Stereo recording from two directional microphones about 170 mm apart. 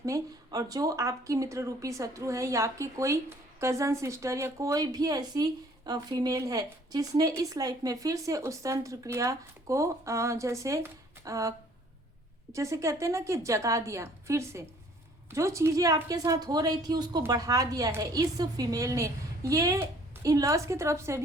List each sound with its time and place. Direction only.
0.0 s a woman's voice: 20° right (ahead or behind)